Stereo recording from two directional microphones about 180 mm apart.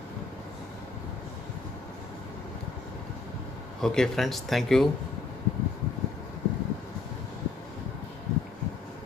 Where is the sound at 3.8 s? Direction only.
5° left (ahead or behind).